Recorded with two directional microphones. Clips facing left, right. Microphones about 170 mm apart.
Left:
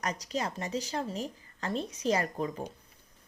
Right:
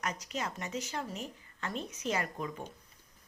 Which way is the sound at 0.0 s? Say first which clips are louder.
Left 4 dB; 35° left (ahead or behind).